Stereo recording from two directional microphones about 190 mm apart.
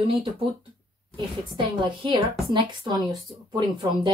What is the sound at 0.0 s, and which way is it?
Speech, 30° right (ahead or behind).